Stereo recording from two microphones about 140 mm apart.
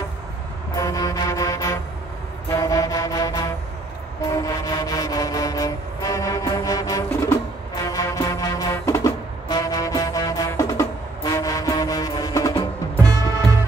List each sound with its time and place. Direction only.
0.7 s music: 25° left (ahead or behind)
4.2 s vehicle: 20° left (ahead or behind)
8.7 s music: 20° left (ahead or behind)